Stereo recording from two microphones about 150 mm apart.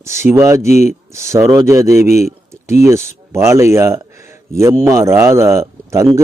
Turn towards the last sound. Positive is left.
turn(degrees=-20)  # may be behind; listen again after turning